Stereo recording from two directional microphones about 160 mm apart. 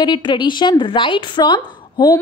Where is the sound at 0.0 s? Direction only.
30° left (ahead or behind).